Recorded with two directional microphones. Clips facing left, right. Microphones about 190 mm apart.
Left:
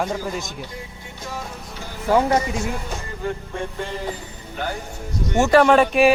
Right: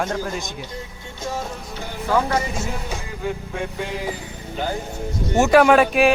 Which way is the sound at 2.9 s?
5° right (ahead or behind).